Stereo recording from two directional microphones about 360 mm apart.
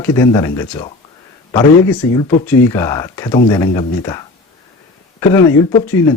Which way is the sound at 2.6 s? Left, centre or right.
Centre.